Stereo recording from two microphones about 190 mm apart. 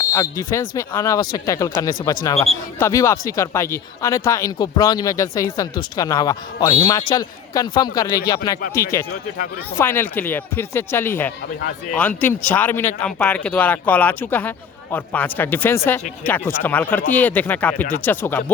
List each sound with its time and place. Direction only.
0.0 s speech: 15° left (ahead or behind)